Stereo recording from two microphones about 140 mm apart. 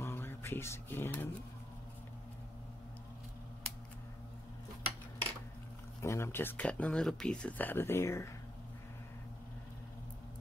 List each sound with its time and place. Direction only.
0.0 s mantra: 15° left (ahead or behind)
5.9 s speech: 20° left (ahead or behind)